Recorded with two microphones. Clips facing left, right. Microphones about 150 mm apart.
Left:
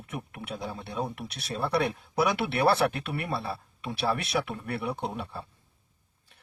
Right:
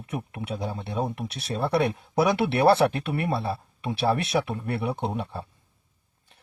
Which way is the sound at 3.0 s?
50° right (ahead or behind).